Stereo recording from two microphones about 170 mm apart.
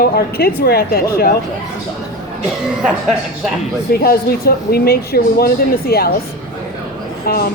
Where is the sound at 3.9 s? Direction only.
65° left (ahead or behind).